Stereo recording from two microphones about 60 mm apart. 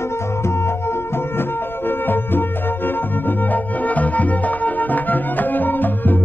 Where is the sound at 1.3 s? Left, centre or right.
Left.